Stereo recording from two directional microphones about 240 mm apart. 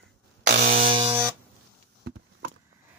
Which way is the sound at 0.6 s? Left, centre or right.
Right.